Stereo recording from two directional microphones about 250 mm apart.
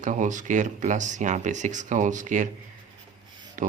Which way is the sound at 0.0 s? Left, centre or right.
Right.